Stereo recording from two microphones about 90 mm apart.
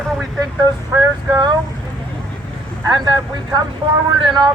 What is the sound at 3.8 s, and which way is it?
Speech, 80° right.